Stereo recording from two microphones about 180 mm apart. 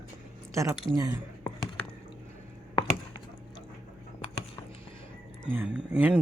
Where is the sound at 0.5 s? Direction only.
15° right (ahead or behind).